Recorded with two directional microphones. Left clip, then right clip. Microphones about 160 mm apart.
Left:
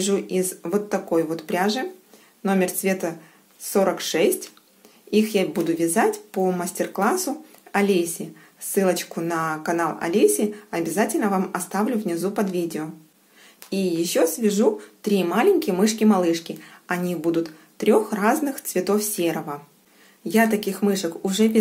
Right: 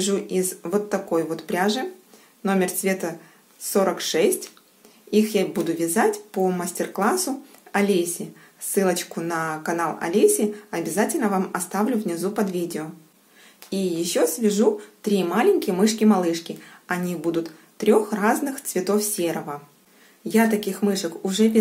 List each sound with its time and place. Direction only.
0.0 s speech: 15° left (ahead or behind)